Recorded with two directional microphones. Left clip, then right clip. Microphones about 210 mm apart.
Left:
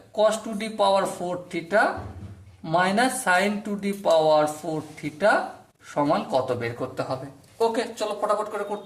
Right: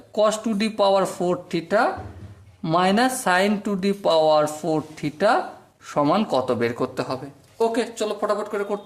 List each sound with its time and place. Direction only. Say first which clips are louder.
0.2 s speech: right 2 dB; 45° right (ahead or behind)